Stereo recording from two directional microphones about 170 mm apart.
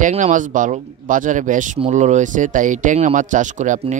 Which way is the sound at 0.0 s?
45° right (ahead or behind).